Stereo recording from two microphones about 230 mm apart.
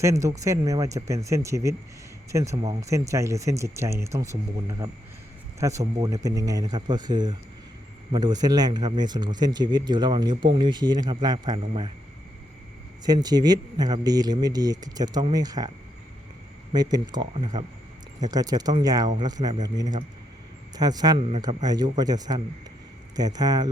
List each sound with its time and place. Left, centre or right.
0.0 s speech: centre
13.1 s speech: centre
16.7 s speech: centre